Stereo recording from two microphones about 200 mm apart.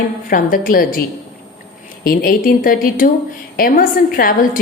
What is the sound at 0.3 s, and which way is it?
Speech, 45° left (ahead or behind).